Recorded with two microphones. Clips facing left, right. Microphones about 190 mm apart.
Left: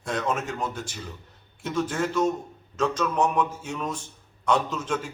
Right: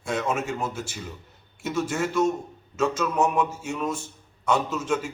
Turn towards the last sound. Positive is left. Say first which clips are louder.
# right 3 dB
turn(degrees=-5)  # may be behind; listen again after turning